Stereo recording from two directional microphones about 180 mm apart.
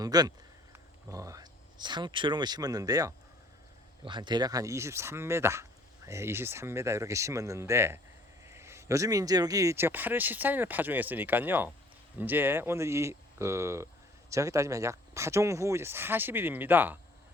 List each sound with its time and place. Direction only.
0.0 s speech: 20° right (ahead or behind)